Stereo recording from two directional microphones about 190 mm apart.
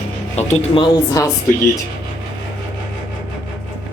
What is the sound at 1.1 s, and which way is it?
Speech, 15° left (ahead or behind).